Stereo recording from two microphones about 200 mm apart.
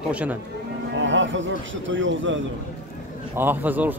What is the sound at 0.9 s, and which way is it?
A man's voice, 70° right (ahead or behind).